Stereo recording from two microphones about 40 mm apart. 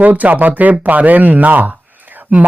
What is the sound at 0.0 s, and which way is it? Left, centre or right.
Speech, right.